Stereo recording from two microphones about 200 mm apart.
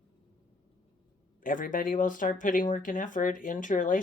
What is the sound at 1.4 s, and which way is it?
Speech, 45° left (ahead or behind).